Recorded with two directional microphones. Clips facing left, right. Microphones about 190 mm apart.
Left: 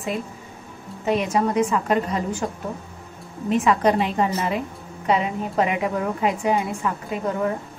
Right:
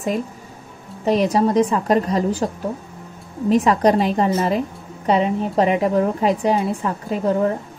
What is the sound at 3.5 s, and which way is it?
A woman's voice, 35° right (ahead or behind).